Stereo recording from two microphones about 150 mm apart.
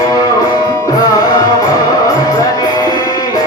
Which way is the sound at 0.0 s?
25° left (ahead or behind).